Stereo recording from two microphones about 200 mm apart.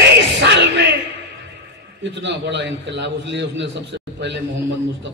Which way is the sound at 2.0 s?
60° right (ahead or behind).